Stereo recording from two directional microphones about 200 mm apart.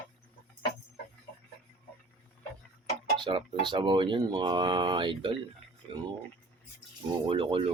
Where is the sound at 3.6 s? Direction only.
25° right (ahead or behind).